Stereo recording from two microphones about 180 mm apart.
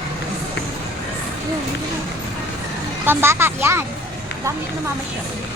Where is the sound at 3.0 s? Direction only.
15° right (ahead or behind).